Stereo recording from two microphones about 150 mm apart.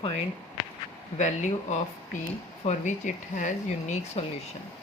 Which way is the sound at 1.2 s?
55° left (ahead or behind).